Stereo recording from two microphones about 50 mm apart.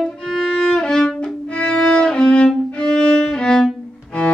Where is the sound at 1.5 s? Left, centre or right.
Left.